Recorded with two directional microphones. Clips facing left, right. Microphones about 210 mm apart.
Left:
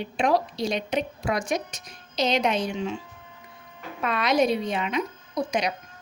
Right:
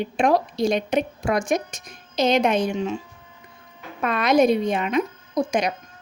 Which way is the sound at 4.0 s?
50° right (ahead or behind).